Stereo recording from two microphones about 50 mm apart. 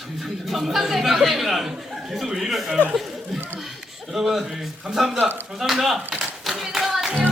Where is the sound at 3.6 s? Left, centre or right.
Centre.